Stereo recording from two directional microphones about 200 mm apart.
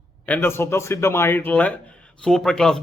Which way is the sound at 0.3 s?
10° left (ahead or behind).